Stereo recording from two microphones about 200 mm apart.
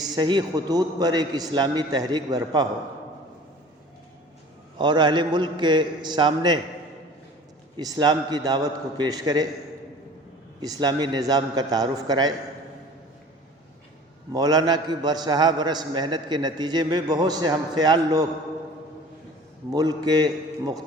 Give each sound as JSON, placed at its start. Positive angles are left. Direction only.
{"t": 0.0, "sound": "a man's voice", "side_deg": -20}
{"t": 4.8, "sound": "a man's voice", "side_deg": -20}
{"t": 7.8, "sound": "a man's voice", "side_deg": -20}
{"t": 10.6, "sound": "a man's voice", "side_deg": -20}
{"t": 14.3, "sound": "a man's voice", "side_deg": -20}
{"t": 19.7, "sound": "a man's voice", "side_deg": -20}